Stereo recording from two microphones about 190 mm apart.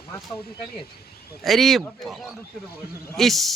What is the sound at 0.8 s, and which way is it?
Speech, 55° left (ahead or behind).